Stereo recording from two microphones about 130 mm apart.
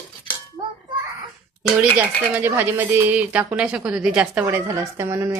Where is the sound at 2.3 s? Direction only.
15° right (ahead or behind).